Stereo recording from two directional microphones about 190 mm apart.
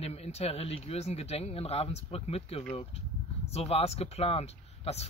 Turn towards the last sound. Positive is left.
turn(degrees=35)  # may be behind; listen again after turning